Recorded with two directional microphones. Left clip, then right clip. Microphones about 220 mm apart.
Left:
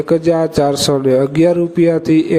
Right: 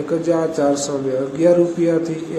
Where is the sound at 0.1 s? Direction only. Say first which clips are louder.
Left 5 dB; 40° left (ahead or behind).